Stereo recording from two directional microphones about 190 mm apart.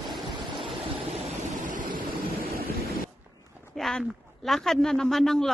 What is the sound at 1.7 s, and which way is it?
Vehicle, 45° right (ahead or behind).